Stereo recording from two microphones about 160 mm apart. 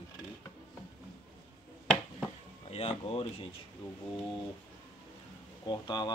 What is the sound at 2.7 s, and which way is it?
Speech, 40° left (ahead or behind).